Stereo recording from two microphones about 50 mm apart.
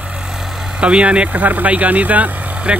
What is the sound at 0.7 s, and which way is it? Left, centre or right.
Speech, right.